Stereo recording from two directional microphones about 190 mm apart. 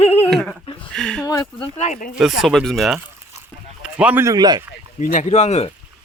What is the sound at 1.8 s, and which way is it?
Speech, 40° left (ahead or behind).